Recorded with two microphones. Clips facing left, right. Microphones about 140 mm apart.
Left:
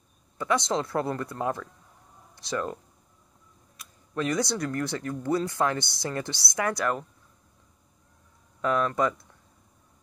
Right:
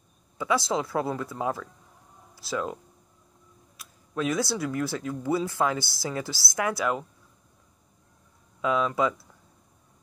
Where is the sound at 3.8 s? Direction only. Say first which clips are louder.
Right 1 dB; centre (ahead or behind).